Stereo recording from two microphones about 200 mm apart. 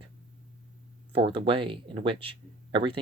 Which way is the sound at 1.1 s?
25° right (ahead or behind).